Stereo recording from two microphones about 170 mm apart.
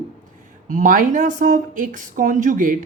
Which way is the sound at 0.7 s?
50° right (ahead or behind).